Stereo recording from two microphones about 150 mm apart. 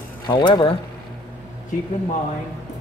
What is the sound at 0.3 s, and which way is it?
Speech, 30° left (ahead or behind).